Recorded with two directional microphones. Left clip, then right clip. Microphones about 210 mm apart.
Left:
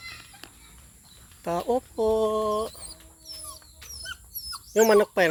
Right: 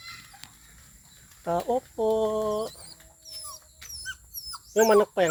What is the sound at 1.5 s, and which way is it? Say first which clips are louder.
Speech: even; 35° left (ahead or behind).